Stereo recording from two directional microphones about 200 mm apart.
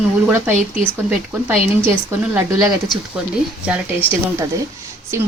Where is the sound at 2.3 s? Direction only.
10° right (ahead or behind).